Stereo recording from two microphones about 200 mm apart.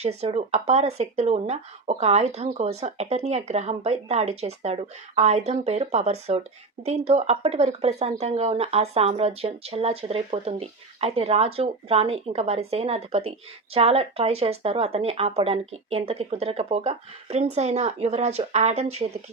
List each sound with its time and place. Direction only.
0.0 s speech: 30° right (ahead or behind)